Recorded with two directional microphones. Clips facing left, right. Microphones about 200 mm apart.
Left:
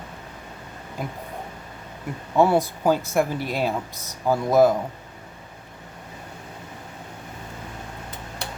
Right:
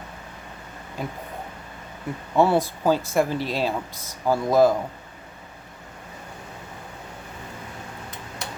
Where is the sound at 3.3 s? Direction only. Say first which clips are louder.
Even; 15° left (ahead or behind).